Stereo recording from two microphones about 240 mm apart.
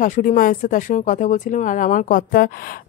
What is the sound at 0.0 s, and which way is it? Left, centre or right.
Speech, left.